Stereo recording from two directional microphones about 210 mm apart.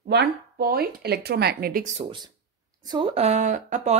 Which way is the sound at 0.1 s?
50° right (ahead or behind).